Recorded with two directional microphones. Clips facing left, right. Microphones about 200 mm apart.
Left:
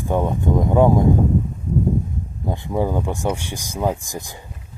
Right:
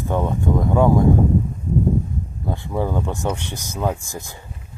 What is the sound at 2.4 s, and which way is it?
Speech, 15° left (ahead or behind).